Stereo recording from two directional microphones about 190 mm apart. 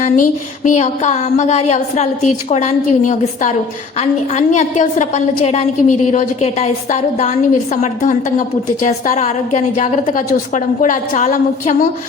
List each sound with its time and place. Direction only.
0.0 s a woman's voice: 40° left (ahead or behind)